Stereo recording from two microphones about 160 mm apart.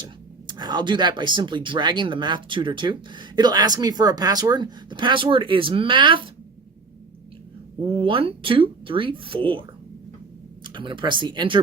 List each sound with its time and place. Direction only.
0.0 s speech: 25° right (ahead or behind)
7.8 s speech: 35° right (ahead or behind)